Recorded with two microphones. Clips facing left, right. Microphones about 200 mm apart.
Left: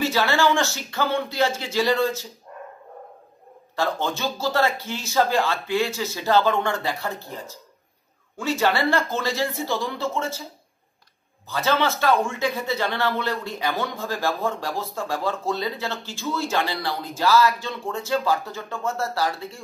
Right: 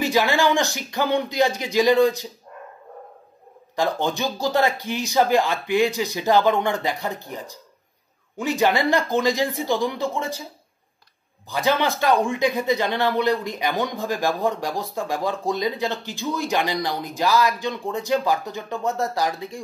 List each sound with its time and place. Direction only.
0.0 s speech: 15° right (ahead or behind)
3.7 s speech: 15° right (ahead or behind)
11.4 s speech: 15° right (ahead or behind)